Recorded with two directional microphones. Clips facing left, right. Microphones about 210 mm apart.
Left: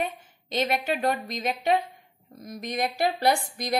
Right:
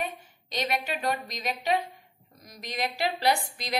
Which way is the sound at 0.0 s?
55° left (ahead or behind).